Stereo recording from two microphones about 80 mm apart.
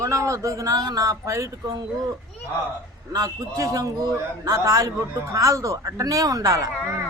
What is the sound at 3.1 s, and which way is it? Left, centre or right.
Speech, right.